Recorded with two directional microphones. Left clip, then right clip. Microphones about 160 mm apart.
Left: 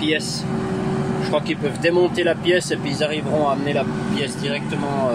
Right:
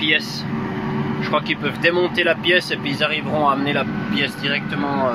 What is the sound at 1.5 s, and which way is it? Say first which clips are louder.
Speech: right 2 dB; 20° left (ahead or behind).